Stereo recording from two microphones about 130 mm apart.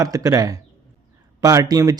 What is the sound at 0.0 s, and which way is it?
Speech, 30° right (ahead or behind).